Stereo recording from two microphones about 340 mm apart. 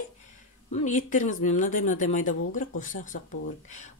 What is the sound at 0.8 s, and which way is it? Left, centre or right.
A woman's voice, left.